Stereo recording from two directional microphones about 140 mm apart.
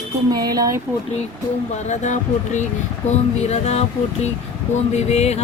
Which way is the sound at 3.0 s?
50° left (ahead or behind).